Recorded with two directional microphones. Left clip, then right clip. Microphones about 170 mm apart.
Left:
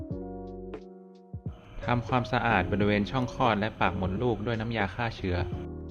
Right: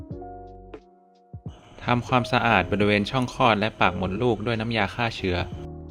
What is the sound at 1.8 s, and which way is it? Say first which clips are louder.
Speech: right 5 dB; 45° right (ahead or behind).